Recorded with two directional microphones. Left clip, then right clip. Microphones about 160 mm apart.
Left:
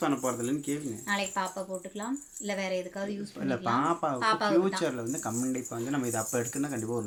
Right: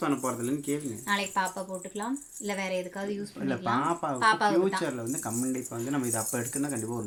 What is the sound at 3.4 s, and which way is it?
Speech, 15° left (ahead or behind).